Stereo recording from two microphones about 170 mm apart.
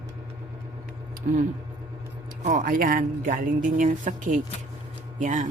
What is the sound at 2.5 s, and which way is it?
Speech, 55° right (ahead or behind).